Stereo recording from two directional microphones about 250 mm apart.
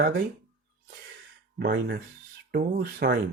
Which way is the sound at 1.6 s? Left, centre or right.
Right.